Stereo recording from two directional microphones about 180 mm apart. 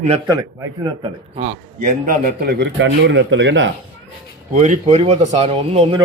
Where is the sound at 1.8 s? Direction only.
45° right (ahead or behind); by 3.7 s 80° right.